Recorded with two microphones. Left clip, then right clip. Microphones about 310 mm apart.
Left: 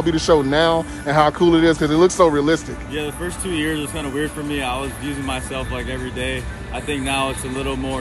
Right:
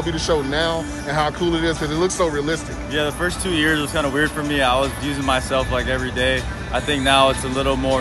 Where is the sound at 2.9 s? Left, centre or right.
Centre.